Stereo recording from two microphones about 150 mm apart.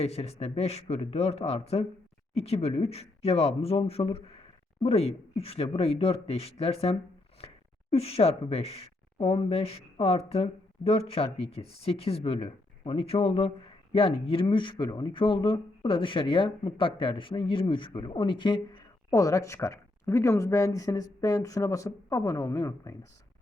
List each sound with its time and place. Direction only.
0.0 s a man's voice: 45° left (ahead or behind); by 23.0 s 20° left (ahead or behind)